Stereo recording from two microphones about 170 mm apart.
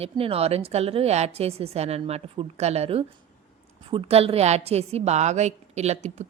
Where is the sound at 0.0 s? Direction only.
35° right (ahead or behind).